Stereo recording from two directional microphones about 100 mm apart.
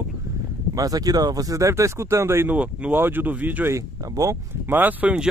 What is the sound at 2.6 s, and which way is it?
Speech, 15° right (ahead or behind).